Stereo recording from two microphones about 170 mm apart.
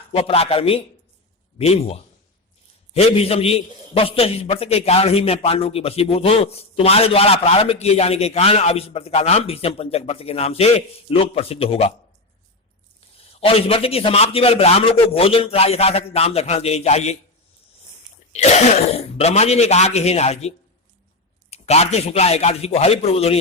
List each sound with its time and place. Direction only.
0.1 s a man's voice: 35° left (ahead or behind)
13.1 s a man's voice: 35° left (ahead or behind)
18.3 s a man's voice: 40° left (ahead or behind)
21.5 s a man's voice: 40° left (ahead or behind)